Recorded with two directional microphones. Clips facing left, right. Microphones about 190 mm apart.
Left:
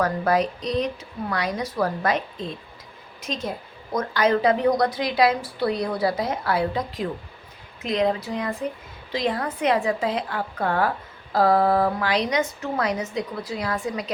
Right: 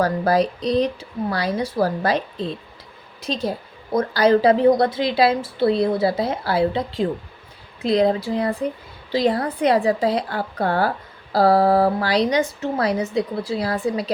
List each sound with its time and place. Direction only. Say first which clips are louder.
0.0 s a woman's voice: right 3 dB; 35° right (ahead or behind)